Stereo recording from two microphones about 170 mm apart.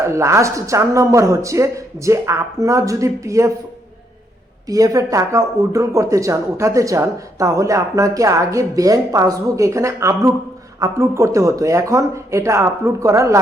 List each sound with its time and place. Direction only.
0.0 s speech: 15° right (ahead or behind)
4.7 s speech: 20° right (ahead or behind)